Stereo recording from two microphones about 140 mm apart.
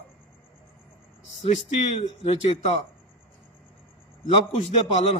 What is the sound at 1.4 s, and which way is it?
Speech, 50° left (ahead or behind).